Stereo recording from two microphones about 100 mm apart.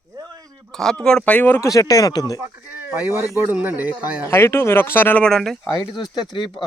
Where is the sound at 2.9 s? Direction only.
20° right (ahead or behind).